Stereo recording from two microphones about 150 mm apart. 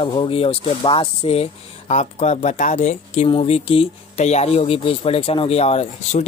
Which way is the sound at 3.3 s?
40° left (ahead or behind).